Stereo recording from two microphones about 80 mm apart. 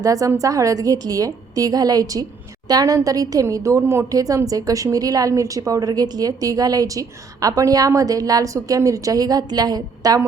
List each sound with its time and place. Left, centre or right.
0.0 s a woman's voice: right